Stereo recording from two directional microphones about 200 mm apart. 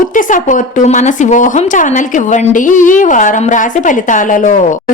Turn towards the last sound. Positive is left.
turn(degrees=40)  # may be behind; listen again after turning